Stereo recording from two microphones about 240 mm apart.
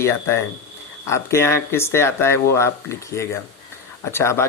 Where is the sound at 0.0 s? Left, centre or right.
Centre.